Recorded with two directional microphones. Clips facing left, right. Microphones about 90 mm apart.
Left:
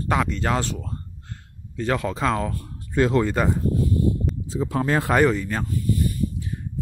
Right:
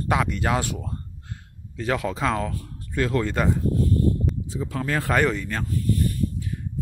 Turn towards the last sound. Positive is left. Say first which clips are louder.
# even
turn(degrees=5)  # may be behind; listen again after turning